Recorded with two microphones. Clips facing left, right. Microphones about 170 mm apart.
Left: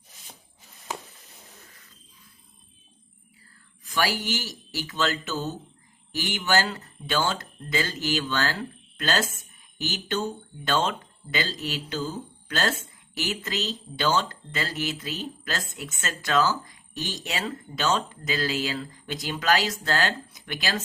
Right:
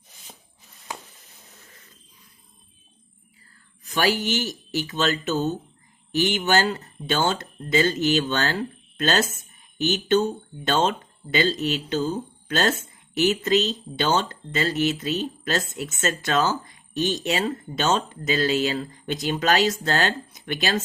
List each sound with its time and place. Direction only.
3.9 s speech: 20° right (ahead or behind)